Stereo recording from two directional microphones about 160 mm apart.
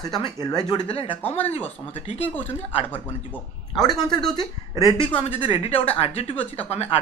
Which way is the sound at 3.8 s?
25° left (ahead or behind).